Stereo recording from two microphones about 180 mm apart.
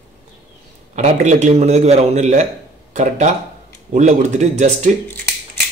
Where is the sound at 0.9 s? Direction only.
40° right (ahead or behind).